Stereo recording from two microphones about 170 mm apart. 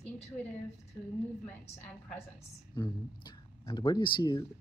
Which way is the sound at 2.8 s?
25° left (ahead or behind).